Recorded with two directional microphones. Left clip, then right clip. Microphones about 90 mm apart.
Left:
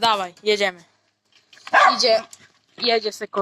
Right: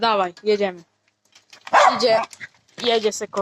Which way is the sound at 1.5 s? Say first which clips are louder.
Even; 35° right (ahead or behind).